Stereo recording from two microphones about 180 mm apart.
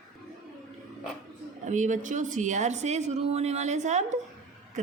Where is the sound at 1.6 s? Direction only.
45° right (ahead or behind).